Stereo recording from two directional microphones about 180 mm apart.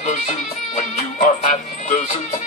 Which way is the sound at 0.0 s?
40° left (ahead or behind).